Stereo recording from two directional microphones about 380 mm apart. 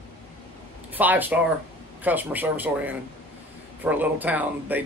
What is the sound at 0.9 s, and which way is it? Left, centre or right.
Speech, centre.